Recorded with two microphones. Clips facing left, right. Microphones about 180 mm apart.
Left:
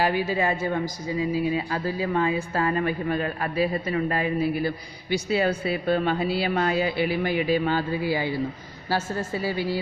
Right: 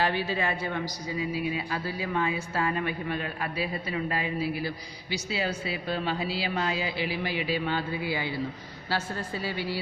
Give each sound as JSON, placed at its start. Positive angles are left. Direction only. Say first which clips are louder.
{"t": 0.1, "sound": "a woman's voice", "louder": "left 5 dB", "side_deg": 15}
{"t": 1.0, "sound": "speech", "louder": "left 6 dB", "side_deg": 35}